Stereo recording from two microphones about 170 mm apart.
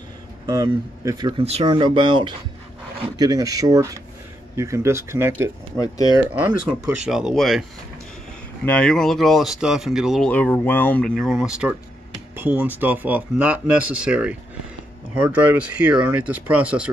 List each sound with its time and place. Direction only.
0.5 s speech: 20° right (ahead or behind)
1.4 s speech: 35° right (ahead or behind); by 5.5 s 15° right (ahead or behind)
5.8 s speech: 20° left (ahead or behind)
6.1 s speech: 10° right (ahead or behind)
8.6 s speech: 5° left (ahead or behind)